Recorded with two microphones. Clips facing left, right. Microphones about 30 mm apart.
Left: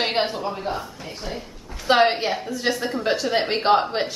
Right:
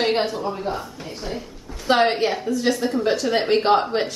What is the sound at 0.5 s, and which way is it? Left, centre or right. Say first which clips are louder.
A woman's voice: right 1 dB; centre.